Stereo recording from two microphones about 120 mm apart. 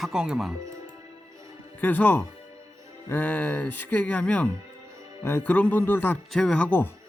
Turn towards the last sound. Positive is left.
turn(degrees=15)  # may be behind; listen again after turning